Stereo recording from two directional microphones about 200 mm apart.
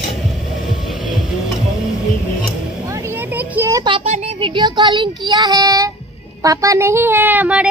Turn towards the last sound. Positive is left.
turn(degrees=-5)  # may be behind; listen again after turning